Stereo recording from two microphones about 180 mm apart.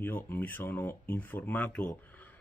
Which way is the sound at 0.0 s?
10° left (ahead or behind).